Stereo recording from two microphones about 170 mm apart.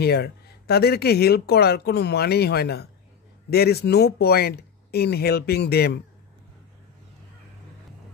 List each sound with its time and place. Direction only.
0.0 s speech: 70° left (ahead or behind)